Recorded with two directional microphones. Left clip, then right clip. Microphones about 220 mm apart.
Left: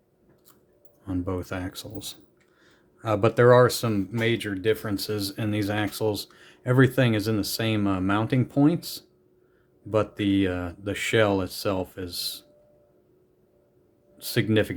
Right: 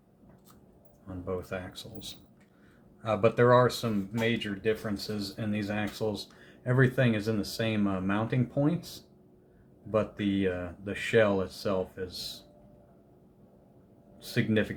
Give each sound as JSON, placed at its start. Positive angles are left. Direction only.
{"t": 1.0, "sound": "speech", "side_deg": 55}
{"t": 9.9, "sound": "speech", "side_deg": 40}
{"t": 14.2, "sound": "speech", "side_deg": 40}